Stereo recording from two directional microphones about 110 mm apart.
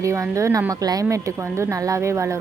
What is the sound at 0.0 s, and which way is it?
A woman's voice, 30° right (ahead or behind).